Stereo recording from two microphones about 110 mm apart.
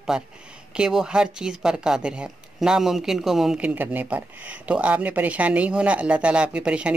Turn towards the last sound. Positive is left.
turn(degrees=-10)  # may be behind; listen again after turning